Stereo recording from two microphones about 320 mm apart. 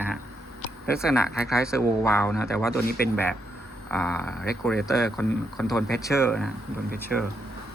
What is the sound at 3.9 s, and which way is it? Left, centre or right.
Speech, centre.